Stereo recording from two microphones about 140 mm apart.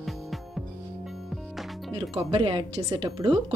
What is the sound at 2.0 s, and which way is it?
A woman's voice, 40° right (ahead or behind).